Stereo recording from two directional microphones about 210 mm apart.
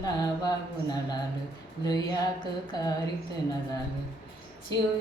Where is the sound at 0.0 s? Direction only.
20° left (ahead or behind).